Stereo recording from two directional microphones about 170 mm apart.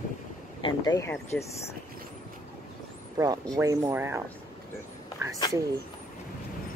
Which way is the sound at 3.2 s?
20° right (ahead or behind).